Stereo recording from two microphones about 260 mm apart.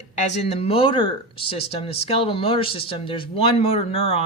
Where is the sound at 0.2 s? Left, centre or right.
Left.